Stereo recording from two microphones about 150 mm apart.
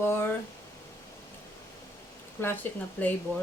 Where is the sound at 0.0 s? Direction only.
15° left (ahead or behind).